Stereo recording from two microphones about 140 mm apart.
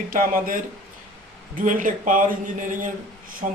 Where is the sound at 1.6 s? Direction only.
70° right (ahead or behind).